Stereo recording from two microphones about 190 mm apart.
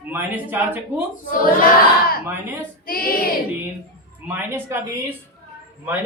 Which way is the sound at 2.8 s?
50° left (ahead or behind).